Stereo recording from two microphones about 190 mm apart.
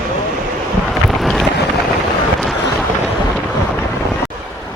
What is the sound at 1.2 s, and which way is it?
Boat, centre (ahead or behind).